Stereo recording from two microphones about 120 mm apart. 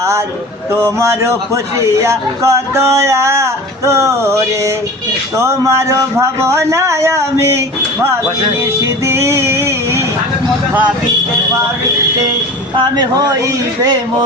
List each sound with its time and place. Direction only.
0.8 s music: 25° right (ahead or behind)
8.8 s music: 20° right (ahead or behind)
12.7 s speech: 40° right (ahead or behind)